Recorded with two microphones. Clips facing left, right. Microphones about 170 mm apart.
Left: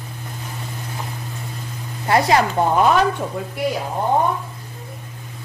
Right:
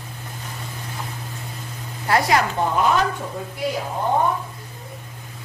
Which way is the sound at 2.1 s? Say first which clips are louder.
Left 3 dB; 20° left (ahead or behind).